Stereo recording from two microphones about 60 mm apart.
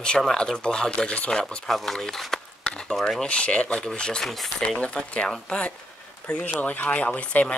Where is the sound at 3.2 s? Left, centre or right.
Centre.